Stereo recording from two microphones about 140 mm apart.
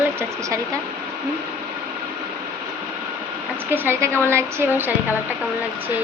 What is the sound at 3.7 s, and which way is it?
A woman's voice, 15° right (ahead or behind).